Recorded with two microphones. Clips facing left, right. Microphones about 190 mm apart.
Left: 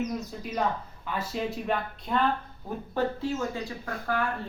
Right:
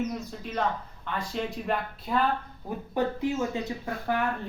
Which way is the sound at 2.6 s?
15° right (ahead or behind).